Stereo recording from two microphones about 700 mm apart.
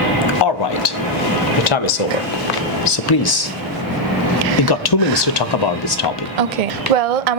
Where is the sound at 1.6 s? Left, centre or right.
Left.